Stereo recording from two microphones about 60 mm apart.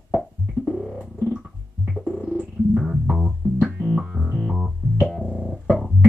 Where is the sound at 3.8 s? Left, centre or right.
Centre.